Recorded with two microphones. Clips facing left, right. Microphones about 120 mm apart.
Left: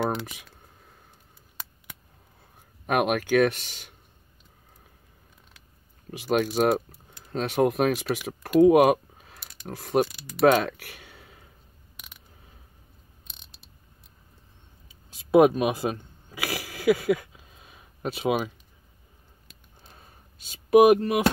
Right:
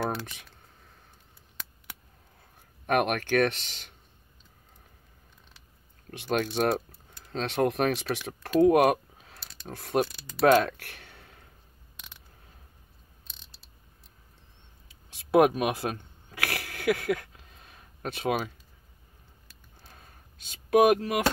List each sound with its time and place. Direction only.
0.1 s speech: 10° left (ahead or behind)
2.9 s speech: 5° left (ahead or behind)
6.0 s speech: 5° left (ahead or behind)
9.5 s mechanisms: 15° left (ahead or behind)
9.8 s speech: centre (ahead or behind)
10.4 s a sound: 5° left (ahead or behind)
13.3 s mechanisms: 20° left (ahead or behind)
15.3 s a sound: centre (ahead or behind)
19.9 s a sound: 5° left (ahead or behind)